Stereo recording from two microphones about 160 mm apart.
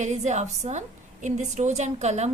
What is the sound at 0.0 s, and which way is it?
A woman's voice, 45° right (ahead or behind).